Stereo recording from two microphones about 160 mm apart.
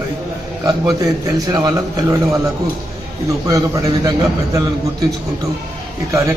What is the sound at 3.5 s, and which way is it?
A man's voice, 20° right (ahead or behind).